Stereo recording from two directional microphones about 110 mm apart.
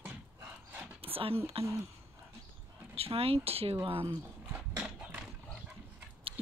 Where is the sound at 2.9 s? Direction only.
60° right (ahead or behind).